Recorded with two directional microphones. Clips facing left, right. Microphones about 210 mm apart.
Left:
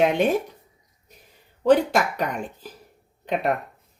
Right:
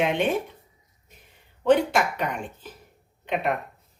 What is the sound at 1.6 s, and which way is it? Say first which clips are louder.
A woman's voice: left 2 dB; 40° left (ahead or behind).